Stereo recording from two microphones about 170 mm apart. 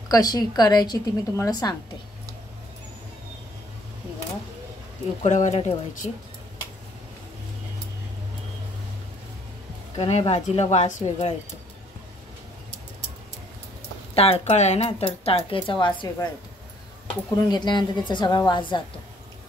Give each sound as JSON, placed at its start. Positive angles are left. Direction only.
{"t": 0.1, "sound": "a woman's voice", "side_deg": 25}
{"t": 5.2, "sound": "speech", "side_deg": 40}
{"t": 9.9, "sound": "speech", "side_deg": 40}
{"t": 14.1, "sound": "a woman's voice", "side_deg": 35}
{"t": 17.5, "sound": "a woman's voice", "side_deg": 25}